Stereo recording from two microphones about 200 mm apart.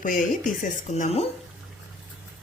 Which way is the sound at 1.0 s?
30° left (ahead or behind).